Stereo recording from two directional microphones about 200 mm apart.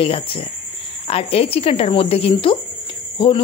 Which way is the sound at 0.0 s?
25° left (ahead or behind).